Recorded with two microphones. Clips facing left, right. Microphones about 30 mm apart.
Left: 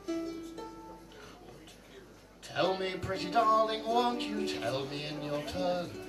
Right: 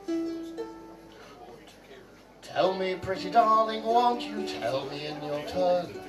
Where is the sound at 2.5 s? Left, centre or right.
Centre.